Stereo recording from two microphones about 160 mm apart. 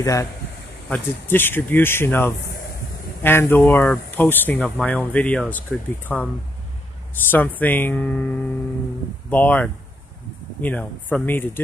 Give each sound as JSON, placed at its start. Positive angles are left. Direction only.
{"t": 0.0, "sound": "speech", "side_deg": 20}
{"t": 0.8, "sound": "speech", "side_deg": 10}